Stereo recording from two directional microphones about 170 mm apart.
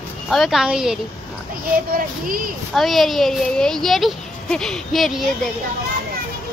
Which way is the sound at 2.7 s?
Centre (ahead or behind).